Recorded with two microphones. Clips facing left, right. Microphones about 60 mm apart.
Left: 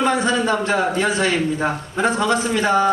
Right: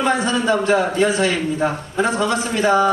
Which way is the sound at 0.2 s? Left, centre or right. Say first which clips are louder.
Right 1 dB; left.